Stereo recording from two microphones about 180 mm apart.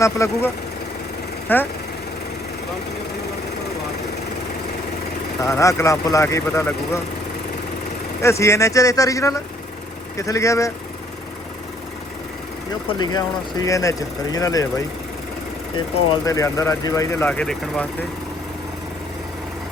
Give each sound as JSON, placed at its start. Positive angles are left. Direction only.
{"t": 0.0, "sound": "speech", "side_deg": 15}
{"t": 5.4, "sound": "speech", "side_deg": 15}
{"t": 8.2, "sound": "speech", "side_deg": 15}
{"t": 13.0, "sound": "speech", "side_deg": 25}
{"t": 16.2, "sound": "speech", "side_deg": 20}